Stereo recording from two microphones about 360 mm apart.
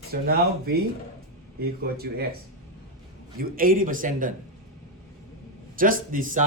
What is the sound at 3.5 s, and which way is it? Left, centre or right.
Speech, right.